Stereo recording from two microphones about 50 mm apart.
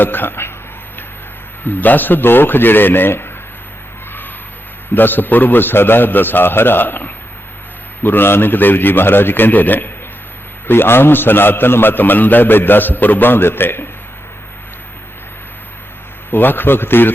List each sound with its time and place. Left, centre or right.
0.0 s a man's voice: left
1.6 s a man's voice: left
4.9 s a man's voice: left
10.7 s a man's voice: left
16.3 s a man's voice: left